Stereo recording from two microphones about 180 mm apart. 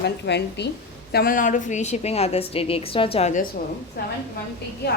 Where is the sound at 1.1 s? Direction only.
55° left (ahead or behind); by 3.4 s 35° left (ahead or behind).